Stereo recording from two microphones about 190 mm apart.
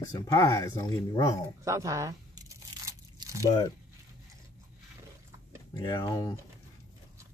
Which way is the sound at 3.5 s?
20° left (ahead or behind).